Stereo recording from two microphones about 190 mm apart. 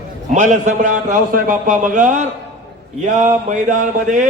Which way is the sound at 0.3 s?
40° right (ahead or behind).